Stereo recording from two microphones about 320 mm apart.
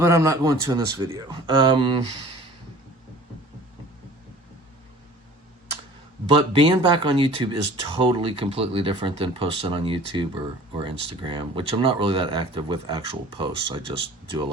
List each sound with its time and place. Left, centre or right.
0.0 s speech: centre
6.3 s speech: centre